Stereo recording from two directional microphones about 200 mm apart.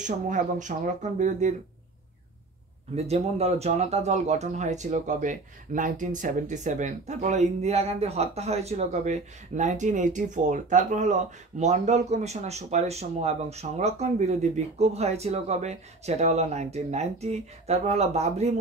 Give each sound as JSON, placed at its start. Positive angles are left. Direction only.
{"t": 0.0, "sound": "speech", "side_deg": -40}
{"t": 3.0, "sound": "speech", "side_deg": -30}